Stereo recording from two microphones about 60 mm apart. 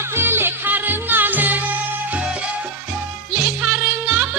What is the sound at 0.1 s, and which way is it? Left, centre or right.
Music, right.